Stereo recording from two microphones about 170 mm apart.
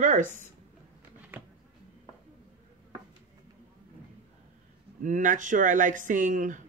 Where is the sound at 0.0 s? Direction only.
50° right (ahead or behind).